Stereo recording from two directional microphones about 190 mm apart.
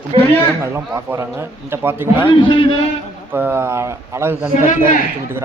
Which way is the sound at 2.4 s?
25° left (ahead or behind).